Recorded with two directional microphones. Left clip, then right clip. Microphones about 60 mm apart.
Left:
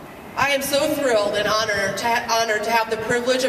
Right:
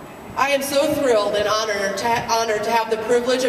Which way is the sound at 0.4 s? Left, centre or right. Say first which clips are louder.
Right 1 dB; left.